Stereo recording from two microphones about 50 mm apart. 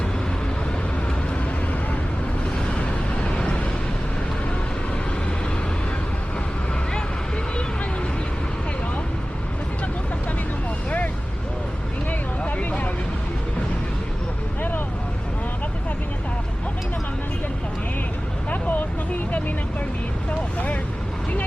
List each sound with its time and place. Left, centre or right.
2.7 s vehicle: left
12.4 s vehicle: left
18.5 s vehicle: left